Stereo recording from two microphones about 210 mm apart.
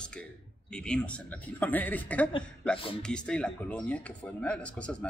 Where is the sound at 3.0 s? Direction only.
5° left (ahead or behind).